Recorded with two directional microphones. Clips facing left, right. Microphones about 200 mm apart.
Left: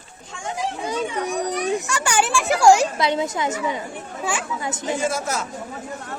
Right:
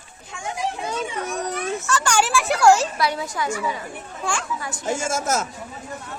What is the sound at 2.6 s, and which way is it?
Speech, 15° left (ahead or behind).